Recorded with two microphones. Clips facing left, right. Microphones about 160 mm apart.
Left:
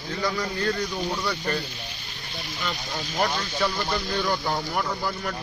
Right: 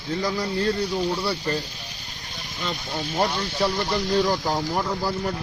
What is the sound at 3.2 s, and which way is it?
Speech, 30° right (ahead or behind).